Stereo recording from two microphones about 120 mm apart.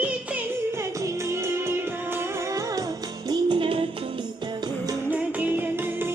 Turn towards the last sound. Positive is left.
turn(degrees=-15)  # may be behind; listen again after turning